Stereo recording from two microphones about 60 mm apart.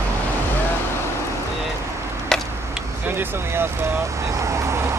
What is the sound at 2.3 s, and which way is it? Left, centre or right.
Tick-tock, centre.